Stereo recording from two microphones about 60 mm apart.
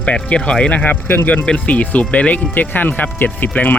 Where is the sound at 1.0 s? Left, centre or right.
Left.